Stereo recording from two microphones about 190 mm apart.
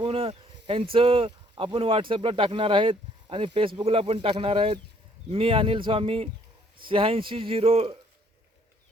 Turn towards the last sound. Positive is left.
turn(degrees=-30)  # may be behind; listen again after turning